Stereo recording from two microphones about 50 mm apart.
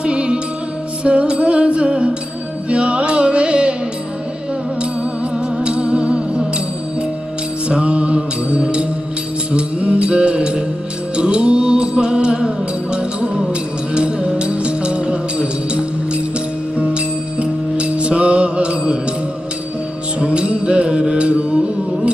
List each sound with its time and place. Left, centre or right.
0.0 s music: right
5.3 s music: centre
7.6 s music: right
20.2 s music: right